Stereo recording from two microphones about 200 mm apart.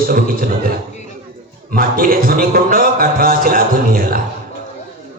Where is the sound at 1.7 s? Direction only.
45° right (ahead or behind).